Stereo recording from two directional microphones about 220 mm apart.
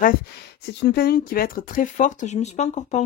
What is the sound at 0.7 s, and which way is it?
Speech, 45° left (ahead or behind).